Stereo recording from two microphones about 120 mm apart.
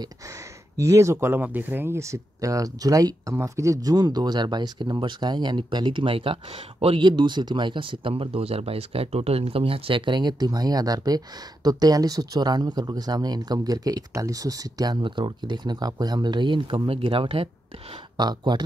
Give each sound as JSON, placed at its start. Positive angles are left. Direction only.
{"t": 0.7, "sound": "speech", "side_deg": -25}
{"t": 18.1, "sound": "speech", "side_deg": -35}